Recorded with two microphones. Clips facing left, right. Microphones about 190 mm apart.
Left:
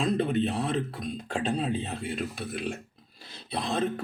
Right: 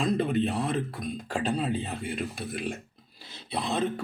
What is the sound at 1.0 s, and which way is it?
Speech, 45° right (ahead or behind).